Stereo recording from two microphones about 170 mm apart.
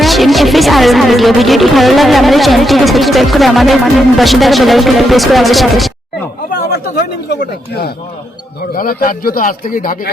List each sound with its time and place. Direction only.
0.0 s speech: centre (ahead or behind)
6.5 s speech: 65° left (ahead or behind)
8.7 s a man's voice: 60° left (ahead or behind)